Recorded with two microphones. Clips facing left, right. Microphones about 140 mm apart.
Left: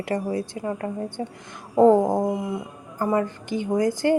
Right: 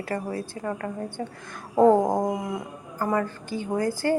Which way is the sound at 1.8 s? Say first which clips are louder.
Left 2 dB; 15° right (ahead or behind).